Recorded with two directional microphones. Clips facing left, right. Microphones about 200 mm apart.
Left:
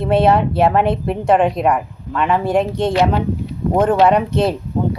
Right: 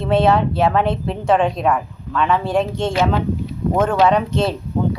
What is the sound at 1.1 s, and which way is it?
A woman's voice, 15° left (ahead or behind).